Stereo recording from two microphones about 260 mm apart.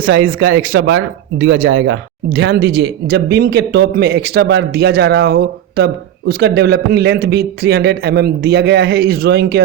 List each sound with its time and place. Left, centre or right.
0.0 s speech: right